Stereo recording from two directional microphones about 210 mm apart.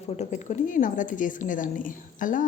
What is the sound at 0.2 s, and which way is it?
Speech, 35° left (ahead or behind).